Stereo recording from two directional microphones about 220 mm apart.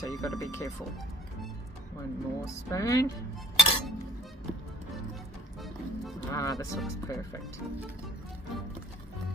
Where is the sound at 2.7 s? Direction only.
15° left (ahead or behind).